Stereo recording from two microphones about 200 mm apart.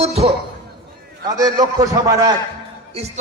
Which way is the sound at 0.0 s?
30° right (ahead or behind).